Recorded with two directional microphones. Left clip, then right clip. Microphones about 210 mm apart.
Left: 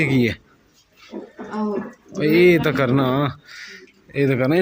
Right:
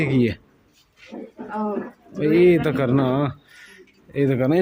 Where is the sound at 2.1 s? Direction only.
5° right (ahead or behind).